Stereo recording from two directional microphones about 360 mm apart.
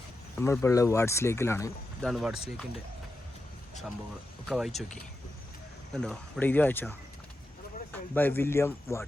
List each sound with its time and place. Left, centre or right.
0.3 s speech: centre
4.4 s speech: centre
5.9 s speech: centre
8.1 s speech: centre